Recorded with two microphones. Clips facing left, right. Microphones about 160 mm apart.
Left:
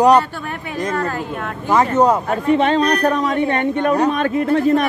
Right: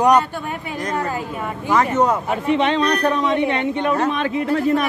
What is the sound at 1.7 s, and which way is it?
Speech, 35° left (ahead or behind).